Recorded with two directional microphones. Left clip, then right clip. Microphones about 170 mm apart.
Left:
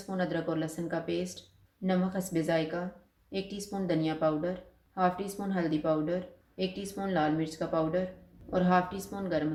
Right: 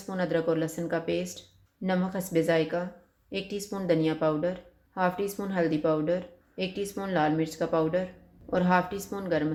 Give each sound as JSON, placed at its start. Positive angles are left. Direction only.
{"t": 0.1, "sound": "speech", "side_deg": -50}